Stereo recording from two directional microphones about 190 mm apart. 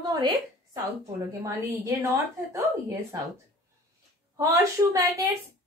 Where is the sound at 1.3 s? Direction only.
15° right (ahead or behind).